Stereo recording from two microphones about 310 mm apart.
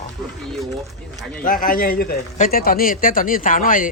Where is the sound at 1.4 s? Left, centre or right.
Left.